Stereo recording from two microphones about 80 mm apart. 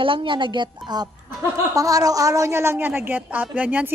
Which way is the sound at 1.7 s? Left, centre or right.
Right.